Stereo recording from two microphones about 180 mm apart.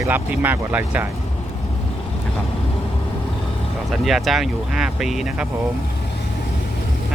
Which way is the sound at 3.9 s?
Centre (ahead or behind).